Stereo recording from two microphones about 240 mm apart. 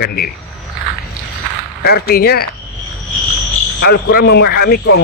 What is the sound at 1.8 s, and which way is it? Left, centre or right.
Speech, left.